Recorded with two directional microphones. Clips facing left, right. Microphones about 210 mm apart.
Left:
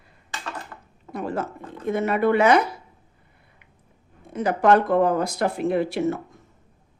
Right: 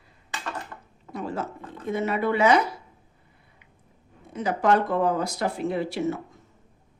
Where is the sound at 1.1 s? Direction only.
55° left (ahead or behind).